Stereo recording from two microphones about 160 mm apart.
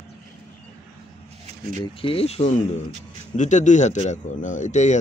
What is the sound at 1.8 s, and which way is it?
Speech, 35° left (ahead or behind).